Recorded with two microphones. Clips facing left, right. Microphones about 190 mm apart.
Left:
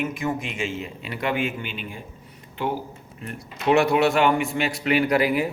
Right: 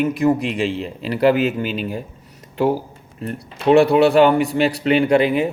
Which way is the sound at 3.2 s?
35° right (ahead or behind).